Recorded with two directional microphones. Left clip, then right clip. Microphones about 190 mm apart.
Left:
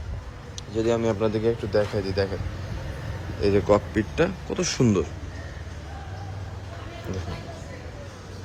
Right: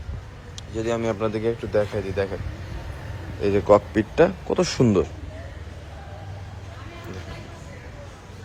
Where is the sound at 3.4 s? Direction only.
5° left (ahead or behind).